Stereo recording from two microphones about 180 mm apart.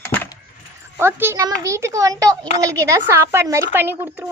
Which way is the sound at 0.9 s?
15° right (ahead or behind).